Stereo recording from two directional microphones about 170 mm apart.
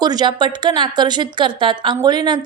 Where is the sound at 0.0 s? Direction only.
25° right (ahead or behind).